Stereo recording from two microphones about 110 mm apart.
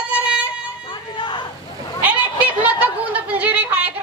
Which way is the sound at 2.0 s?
15° right (ahead or behind).